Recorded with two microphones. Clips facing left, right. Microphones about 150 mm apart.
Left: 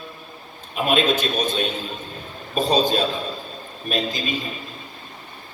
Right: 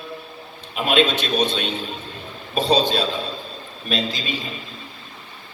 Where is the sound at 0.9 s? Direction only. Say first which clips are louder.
Right 1 dB; 45° left (ahead or behind).